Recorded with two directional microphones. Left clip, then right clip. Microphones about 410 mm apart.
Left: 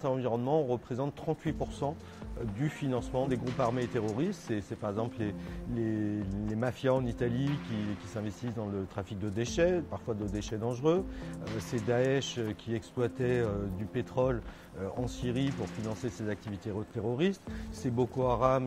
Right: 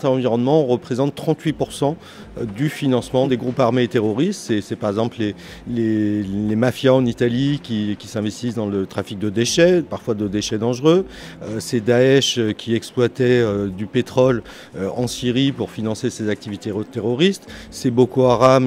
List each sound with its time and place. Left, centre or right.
0.0 s speech: centre